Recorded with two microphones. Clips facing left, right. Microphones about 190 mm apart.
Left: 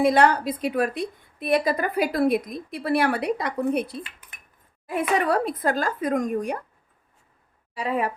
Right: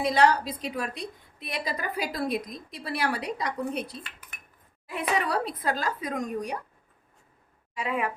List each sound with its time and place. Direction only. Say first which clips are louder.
0.0 s a woman's voice: left 4 dB; 55° left (ahead or behind)
7.8 s speech: left 4 dB; 35° left (ahead or behind)